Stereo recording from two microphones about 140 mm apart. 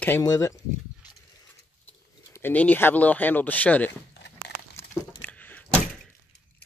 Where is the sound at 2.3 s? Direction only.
15° left (ahead or behind).